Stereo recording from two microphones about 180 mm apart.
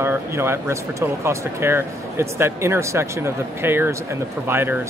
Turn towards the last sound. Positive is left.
turn(degrees=-10)  # may be behind; listen again after turning